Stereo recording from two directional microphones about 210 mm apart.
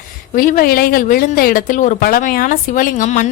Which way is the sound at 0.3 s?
40° left (ahead or behind).